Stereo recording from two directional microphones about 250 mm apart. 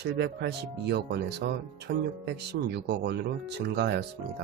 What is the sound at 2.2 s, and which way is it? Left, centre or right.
Speech, right.